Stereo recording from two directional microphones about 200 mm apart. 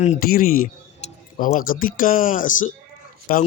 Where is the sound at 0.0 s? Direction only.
40° left (ahead or behind).